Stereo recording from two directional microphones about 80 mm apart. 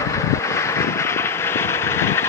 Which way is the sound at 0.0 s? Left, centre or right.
Left.